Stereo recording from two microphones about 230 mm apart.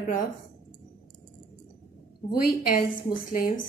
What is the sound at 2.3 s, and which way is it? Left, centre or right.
A woman's voice, left.